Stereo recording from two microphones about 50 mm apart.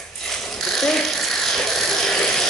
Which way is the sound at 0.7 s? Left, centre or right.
Centre.